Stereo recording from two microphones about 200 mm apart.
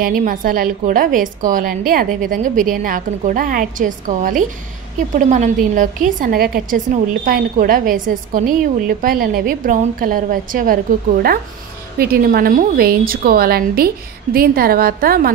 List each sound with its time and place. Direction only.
0.0 s a woman's voice: 45° right (ahead or behind)
12.0 s a woman's voice: 50° right (ahead or behind)